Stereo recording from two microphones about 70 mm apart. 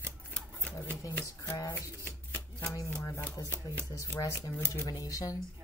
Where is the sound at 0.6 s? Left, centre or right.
Left.